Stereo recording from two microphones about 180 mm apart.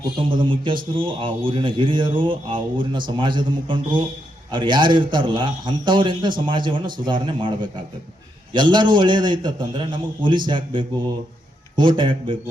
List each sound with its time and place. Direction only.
0.2 s speech: 30° right (ahead or behind)